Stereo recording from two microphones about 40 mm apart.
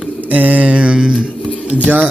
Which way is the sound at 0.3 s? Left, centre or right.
Right.